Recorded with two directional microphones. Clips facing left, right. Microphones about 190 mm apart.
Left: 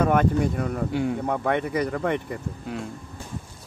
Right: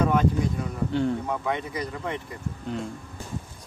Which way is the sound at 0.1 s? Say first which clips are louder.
Left 2 dB; 60° left (ahead or behind).